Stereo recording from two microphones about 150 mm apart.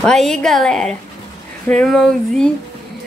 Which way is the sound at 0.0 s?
5° left (ahead or behind).